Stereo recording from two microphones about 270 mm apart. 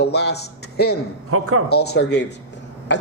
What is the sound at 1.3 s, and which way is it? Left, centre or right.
Speech, right.